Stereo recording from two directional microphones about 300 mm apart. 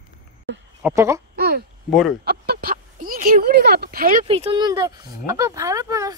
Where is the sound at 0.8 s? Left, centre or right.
Centre.